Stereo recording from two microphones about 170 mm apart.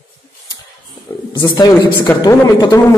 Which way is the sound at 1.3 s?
25° left (ahead or behind).